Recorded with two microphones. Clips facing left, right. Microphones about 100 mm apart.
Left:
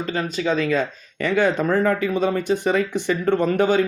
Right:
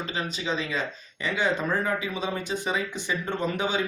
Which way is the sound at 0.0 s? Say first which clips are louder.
Left 7 dB; 50° left (ahead or behind).